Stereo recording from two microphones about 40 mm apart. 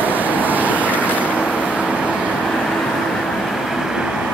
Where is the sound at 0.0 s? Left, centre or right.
Right.